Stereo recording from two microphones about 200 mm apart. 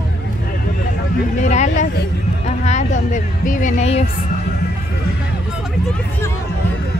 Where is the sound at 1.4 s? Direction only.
35° left (ahead or behind).